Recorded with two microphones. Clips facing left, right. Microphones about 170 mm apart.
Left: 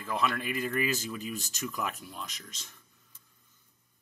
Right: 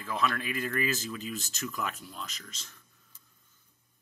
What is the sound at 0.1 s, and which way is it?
Speech, 5° left (ahead or behind).